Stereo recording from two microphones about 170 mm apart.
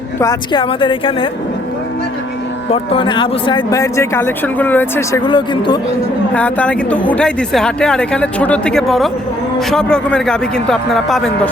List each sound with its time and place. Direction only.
0.2 s speech: 20° left (ahead or behind)
0.6 s a woman's voice: 30° left (ahead or behind)
2.6 s speech: 30° left (ahead or behind); by 5.2 s 15° left (ahead or behind)
5.2 s speech: 25° left (ahead or behind)
6.3 s a woman's voice: 10° left (ahead or behind)